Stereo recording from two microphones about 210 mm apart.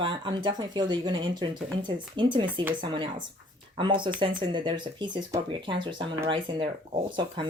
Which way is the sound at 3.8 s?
20° right (ahead or behind).